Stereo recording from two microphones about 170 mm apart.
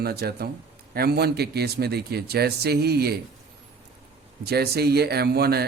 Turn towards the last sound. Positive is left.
turn(degrees=-70)  # may be behind; listen again after turning